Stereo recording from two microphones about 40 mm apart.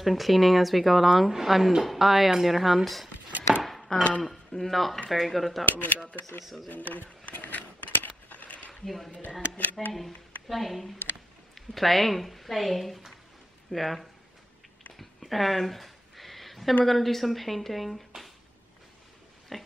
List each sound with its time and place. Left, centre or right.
0.0 s a woman's voice: centre
3.3 s chopping: right
3.6 s chopping: centre
4.2 s a woman's voice: centre
5.7 s speech: left
6.4 s a woman's voice: centre
6.7 s speech: left
7.2 s a sound: left
8.8 s a woman's voice: centre
15.0 s a sound: centre
16.8 s a woman's voice: centre
19.5 s pig: centre